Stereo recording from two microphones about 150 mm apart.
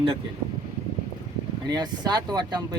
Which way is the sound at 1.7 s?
25° right (ahead or behind).